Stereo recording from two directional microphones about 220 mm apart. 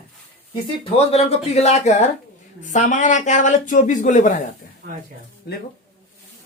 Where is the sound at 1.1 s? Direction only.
30° left (ahead or behind).